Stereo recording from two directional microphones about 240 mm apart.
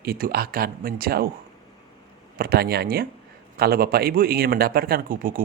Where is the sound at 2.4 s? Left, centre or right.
Right.